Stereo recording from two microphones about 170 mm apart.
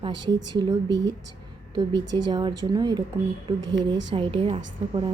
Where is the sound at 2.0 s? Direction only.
25° right (ahead or behind).